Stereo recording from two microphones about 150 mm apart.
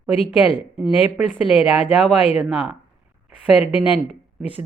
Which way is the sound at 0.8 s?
5° right (ahead or behind).